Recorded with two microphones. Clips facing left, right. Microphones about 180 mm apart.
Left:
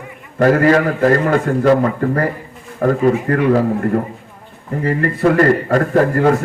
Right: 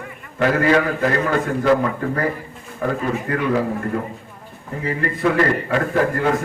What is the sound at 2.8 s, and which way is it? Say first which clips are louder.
Speech: left 8 dB; 45° left (ahead or behind).